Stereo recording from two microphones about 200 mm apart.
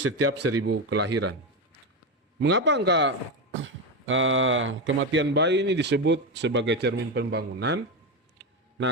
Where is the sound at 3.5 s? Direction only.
70° right (ahead or behind); by 7.8 s 55° right (ahead or behind).